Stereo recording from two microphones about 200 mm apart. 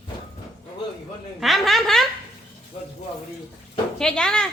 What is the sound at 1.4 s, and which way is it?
Speech, centre (ahead or behind).